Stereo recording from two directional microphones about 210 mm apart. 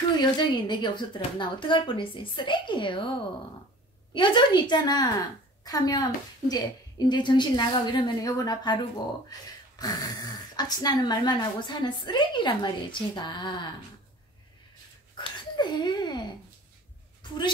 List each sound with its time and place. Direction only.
0.2 s speech: 20° left (ahead or behind)
4.1 s speech: 20° left (ahead or behind)
15.1 s speech: 20° left (ahead or behind)